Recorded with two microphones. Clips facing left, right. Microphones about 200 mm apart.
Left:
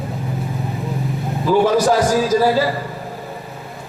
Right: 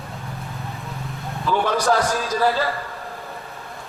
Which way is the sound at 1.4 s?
30° left (ahead or behind).